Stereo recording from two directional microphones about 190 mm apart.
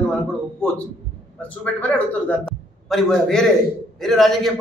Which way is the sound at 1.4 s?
10° left (ahead or behind).